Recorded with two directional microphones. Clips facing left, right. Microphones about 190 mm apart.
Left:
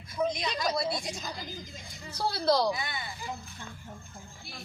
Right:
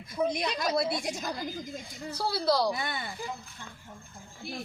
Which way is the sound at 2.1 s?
10° right (ahead or behind).